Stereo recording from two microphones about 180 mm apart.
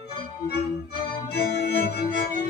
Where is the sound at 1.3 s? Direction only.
65° left (ahead or behind).